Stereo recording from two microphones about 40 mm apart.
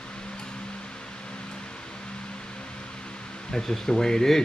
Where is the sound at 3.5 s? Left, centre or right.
Centre.